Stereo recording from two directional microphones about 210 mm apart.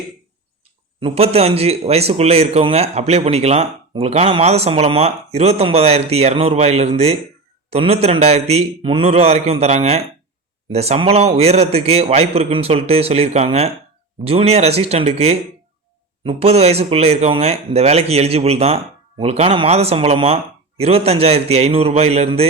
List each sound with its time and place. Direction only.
1.0 s a man's voice: 30° right (ahead or behind)